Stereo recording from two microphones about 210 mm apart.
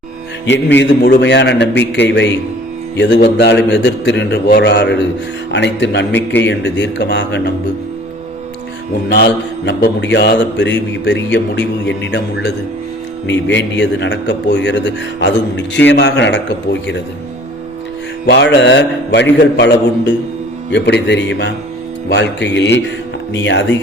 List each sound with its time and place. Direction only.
0.4 s a man's voice: 55° left (ahead or behind)
9.0 s a man's voice: 50° left (ahead or behind)
18.3 s a man's voice: 55° left (ahead or behind)